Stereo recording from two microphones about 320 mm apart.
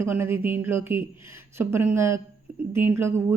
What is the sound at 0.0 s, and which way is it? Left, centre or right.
A woman's voice, centre.